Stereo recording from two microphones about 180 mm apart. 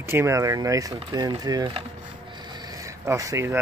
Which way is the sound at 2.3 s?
25° right (ahead or behind).